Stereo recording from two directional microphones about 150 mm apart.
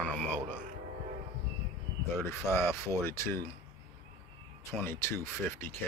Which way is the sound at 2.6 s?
15° left (ahead or behind).